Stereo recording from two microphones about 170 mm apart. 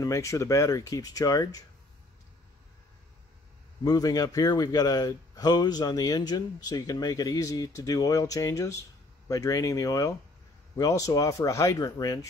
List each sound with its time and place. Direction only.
0.0 s a man's voice: 20° left (ahead or behind)
3.8 s a man's voice: 20° left (ahead or behind)